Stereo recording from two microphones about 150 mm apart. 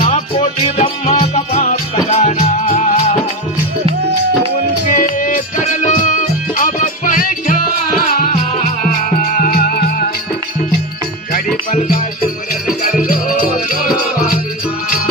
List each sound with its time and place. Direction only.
0.0 s music: 40° left (ahead or behind)
1.5 s music: 50° left (ahead or behind)
4.9 s music: 65° left (ahead or behind)
8.0 s music: 80° left
8.3 s music: 60° left (ahead or behind); by 10.1 s 80° left
11.7 s music: 60° left (ahead or behind)
13.8 s music: 75° left (ahead or behind)